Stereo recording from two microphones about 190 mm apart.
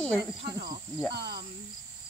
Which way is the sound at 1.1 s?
55° right (ahead or behind).